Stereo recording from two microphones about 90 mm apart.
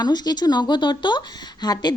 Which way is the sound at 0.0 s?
50° left (ahead or behind).